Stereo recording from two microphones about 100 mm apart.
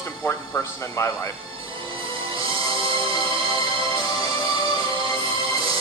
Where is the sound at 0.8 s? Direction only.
30° left (ahead or behind).